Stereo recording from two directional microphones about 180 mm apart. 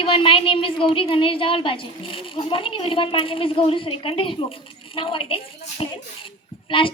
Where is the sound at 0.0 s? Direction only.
30° left (ahead or behind).